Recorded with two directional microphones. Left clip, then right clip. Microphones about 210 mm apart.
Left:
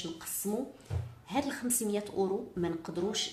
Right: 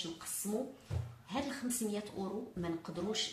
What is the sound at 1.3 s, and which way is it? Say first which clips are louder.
A woman's voice: left 6 dB; 40° left (ahead or behind).